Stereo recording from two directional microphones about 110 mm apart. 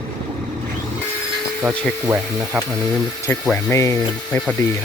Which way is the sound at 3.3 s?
15° left (ahead or behind).